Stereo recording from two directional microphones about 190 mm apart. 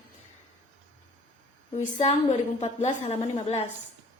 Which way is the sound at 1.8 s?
40° left (ahead or behind).